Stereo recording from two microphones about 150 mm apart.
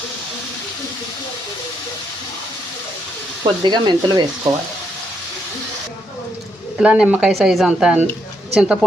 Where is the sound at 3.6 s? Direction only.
30° right (ahead or behind).